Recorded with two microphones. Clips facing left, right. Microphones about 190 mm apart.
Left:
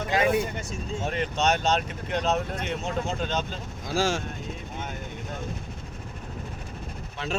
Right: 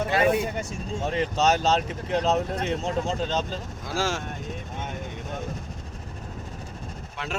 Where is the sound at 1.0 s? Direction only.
30° right (ahead or behind).